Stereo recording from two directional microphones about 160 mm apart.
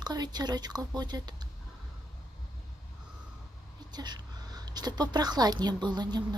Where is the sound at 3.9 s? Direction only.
25° right (ahead or behind).